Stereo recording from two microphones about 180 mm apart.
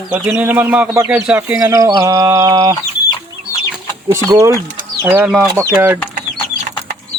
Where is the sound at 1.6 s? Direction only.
20° right (ahead or behind).